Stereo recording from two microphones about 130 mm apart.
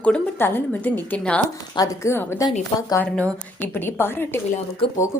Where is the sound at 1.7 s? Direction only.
25° left (ahead or behind).